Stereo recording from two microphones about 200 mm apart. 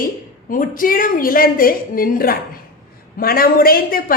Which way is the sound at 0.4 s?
45° left (ahead or behind).